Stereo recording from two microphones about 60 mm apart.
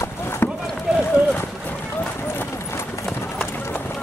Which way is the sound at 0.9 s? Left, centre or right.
Centre.